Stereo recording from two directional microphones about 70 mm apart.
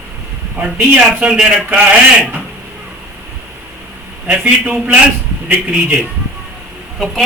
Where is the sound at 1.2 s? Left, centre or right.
Centre.